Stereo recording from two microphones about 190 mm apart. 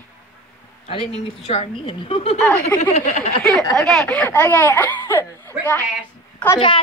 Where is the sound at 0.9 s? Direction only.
30° left (ahead or behind).